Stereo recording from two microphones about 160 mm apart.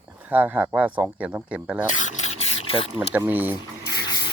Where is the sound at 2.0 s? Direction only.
50° left (ahead or behind).